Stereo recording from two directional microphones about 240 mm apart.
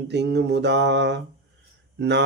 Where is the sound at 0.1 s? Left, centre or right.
Right.